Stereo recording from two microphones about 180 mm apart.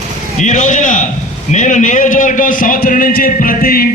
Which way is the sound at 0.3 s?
45° left (ahead or behind).